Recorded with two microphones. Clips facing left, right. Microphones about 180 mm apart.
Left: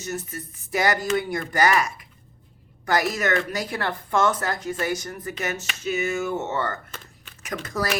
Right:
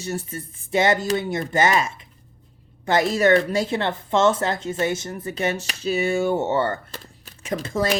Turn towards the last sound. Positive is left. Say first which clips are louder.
# right 4 dB
turn(degrees=-25)  # may be behind; listen again after turning